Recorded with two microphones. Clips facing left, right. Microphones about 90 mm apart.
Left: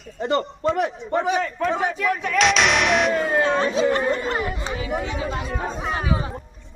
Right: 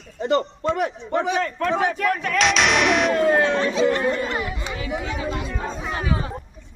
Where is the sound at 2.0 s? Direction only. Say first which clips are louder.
Right 1 dB; 50° right (ahead or behind).